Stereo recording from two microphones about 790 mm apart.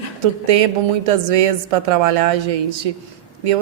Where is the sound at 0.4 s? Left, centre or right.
Right.